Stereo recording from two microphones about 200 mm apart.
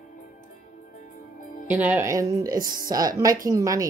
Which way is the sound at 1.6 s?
10° right (ahead or behind).